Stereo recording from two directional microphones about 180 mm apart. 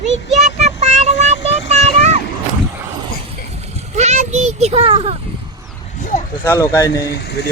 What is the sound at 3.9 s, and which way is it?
A child's voice, 40° right (ahead or behind).